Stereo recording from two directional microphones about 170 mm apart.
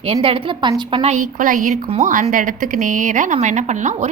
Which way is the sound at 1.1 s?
50° right (ahead or behind).